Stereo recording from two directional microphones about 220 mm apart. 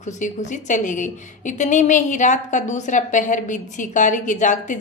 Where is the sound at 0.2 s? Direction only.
35° left (ahead or behind).